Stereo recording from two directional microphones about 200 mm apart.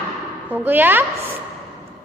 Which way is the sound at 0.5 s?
10° right (ahead or behind).